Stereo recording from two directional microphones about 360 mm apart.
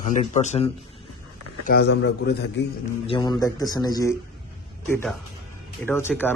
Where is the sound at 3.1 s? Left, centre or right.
Centre.